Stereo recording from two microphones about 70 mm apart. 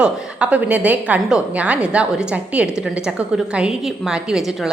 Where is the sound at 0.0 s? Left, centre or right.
Centre.